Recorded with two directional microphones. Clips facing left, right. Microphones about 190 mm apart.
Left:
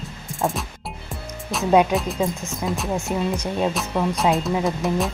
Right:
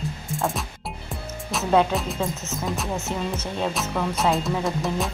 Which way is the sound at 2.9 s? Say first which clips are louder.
Left 4 dB; 15° left (ahead or behind).